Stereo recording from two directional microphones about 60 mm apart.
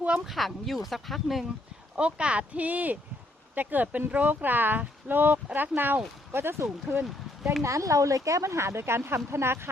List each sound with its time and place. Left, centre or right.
0.3 s speech: centre
2.0 s speech: centre; by 7.0 s right
7.6 s speech: right